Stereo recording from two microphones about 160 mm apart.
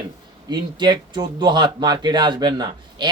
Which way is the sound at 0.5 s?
30° right (ahead or behind).